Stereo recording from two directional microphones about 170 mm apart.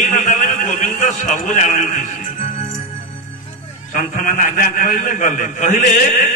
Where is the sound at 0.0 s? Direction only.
45° left (ahead or behind).